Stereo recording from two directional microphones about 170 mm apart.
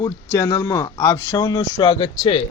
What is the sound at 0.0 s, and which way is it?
Speech, 20° left (ahead or behind).